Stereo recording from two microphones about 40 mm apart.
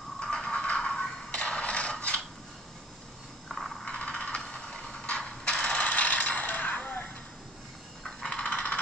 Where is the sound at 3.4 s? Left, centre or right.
Centre.